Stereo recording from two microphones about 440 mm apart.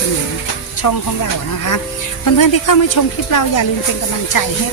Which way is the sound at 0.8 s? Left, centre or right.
Left.